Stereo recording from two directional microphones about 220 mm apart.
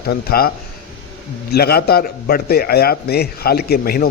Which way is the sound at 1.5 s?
45° left (ahead or behind).